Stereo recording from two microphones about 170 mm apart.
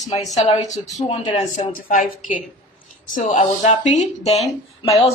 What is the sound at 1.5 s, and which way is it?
A woman's voice, 50° left (ahead or behind).